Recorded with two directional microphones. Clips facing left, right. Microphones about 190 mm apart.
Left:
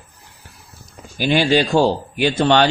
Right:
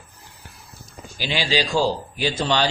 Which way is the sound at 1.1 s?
55° left (ahead or behind).